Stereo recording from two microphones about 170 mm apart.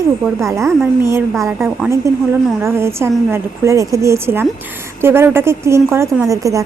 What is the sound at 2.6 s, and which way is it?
A woman's voice, 15° right (ahead or behind).